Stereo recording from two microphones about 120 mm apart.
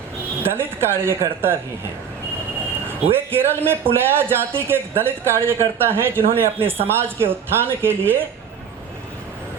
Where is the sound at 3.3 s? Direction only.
20° right (ahead or behind).